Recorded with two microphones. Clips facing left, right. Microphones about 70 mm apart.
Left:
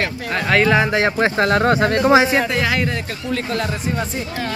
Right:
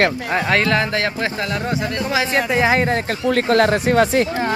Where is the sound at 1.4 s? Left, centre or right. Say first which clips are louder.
Left 10 dB; left.